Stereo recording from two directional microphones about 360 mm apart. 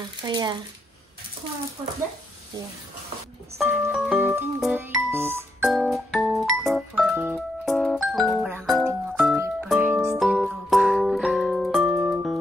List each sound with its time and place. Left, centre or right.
0.2 s speech: centre
3.5 s music: centre